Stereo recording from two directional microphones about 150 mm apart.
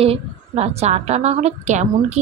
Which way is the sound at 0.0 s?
45° right (ahead or behind).